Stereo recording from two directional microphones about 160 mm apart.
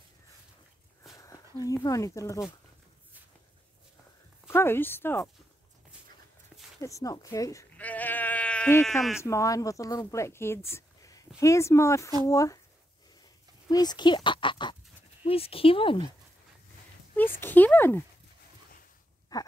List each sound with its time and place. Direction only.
1.1 s speech: 20° left (ahead or behind)
4.5 s speech: 15° left (ahead or behind)
6.8 s speech: 20° left (ahead or behind)
7.7 s sheep: 10° left (ahead or behind)
9.2 s speech: 20° left (ahead or behind)
13.7 s speech: 25° left (ahead or behind)
17.4 s speech: 10° left (ahead or behind)
19.3 s speech: 20° left (ahead or behind)